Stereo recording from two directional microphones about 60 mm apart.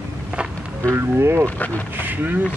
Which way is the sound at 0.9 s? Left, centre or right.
Right.